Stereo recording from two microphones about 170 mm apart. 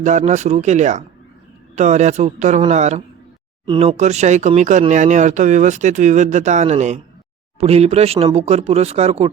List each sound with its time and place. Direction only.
0.0 s speech: 45° right (ahead or behind)